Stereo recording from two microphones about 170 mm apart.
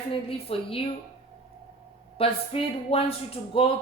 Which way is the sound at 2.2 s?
35° left (ahead or behind).